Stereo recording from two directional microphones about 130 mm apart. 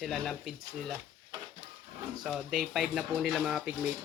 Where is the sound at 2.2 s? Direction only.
5° right (ahead or behind).